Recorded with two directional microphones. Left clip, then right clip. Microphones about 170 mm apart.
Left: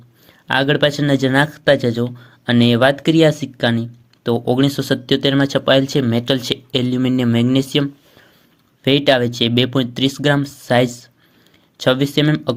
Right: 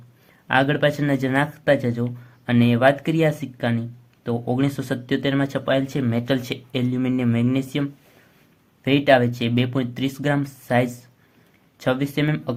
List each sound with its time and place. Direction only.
0.4 s speech: 30° left (ahead or behind)